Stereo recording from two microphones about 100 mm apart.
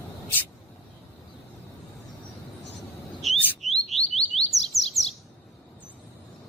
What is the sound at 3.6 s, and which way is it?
Bird, centre (ahead or behind).